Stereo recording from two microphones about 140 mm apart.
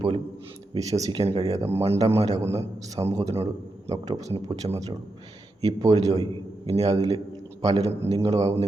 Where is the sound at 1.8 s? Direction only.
45° right (ahead or behind).